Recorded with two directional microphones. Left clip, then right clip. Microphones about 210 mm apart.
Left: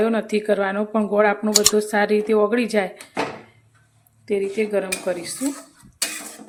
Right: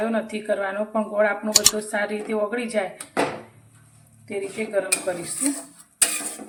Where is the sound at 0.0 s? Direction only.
50° left (ahead or behind).